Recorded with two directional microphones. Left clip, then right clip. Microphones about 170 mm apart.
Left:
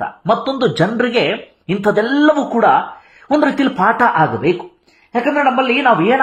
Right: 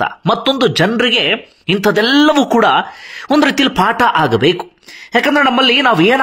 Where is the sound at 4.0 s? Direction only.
30° right (ahead or behind).